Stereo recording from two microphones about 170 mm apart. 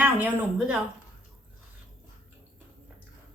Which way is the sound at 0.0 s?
10° right (ahead or behind).